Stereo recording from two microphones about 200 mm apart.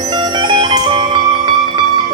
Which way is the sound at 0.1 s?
20° right (ahead or behind).